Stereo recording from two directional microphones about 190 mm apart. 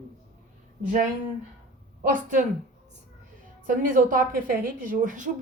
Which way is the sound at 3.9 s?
45° right (ahead or behind).